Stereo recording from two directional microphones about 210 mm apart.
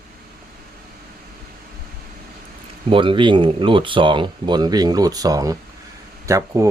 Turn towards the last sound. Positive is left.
turn(degrees=-15)  # may be behind; listen again after turning